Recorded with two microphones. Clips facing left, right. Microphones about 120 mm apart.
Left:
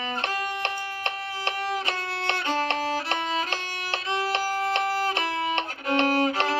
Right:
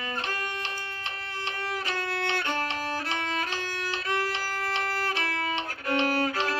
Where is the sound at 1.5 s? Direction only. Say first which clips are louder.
Left 6 dB; 65° left (ahead or behind).